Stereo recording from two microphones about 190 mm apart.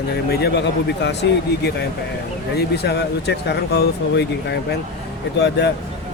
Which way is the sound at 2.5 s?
60° left (ahead or behind).